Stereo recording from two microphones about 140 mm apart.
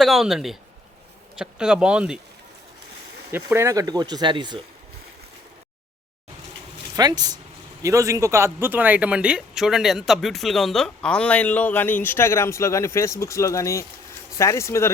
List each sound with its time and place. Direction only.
0.0 s speech: centre (ahead or behind)
3.3 s speech: 20° right (ahead or behind); by 4.6 s 35° right (ahead or behind)
6.9 s speech: 30° right (ahead or behind); by 14.9 s 20° left (ahead or behind)